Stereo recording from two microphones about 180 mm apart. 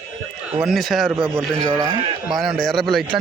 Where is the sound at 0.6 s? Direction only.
Centre (ahead or behind).